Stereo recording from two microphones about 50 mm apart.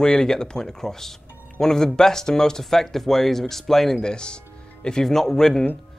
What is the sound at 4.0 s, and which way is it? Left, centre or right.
Speech, centre.